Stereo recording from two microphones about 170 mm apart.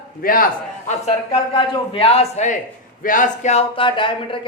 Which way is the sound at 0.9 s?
40° left (ahead or behind).